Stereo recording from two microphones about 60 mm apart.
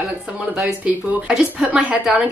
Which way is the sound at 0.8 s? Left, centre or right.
Right.